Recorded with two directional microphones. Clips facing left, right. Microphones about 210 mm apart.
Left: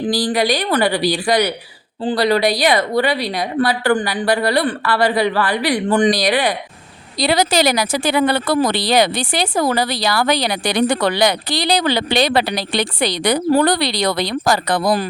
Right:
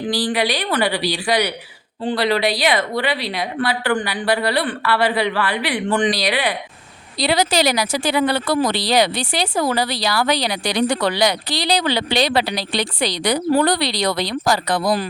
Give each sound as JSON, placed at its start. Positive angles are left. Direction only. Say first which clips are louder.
{"t": 0.1, "sound": "speech", "louder": "left 2 dB", "side_deg": 40}